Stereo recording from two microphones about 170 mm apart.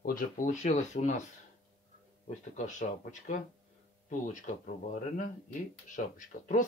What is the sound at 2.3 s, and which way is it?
Speech, 45° left (ahead or behind).